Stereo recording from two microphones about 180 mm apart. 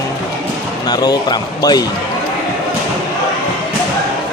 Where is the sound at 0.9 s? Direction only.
25° left (ahead or behind).